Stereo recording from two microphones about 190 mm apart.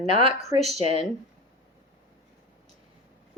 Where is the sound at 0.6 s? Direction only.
35° right (ahead or behind).